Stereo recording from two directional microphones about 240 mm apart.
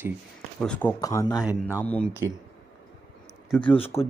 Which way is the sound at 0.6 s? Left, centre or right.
Centre.